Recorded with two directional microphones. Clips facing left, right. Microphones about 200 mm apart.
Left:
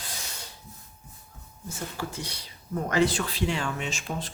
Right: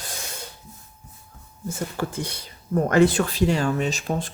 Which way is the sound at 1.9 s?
50° right (ahead or behind).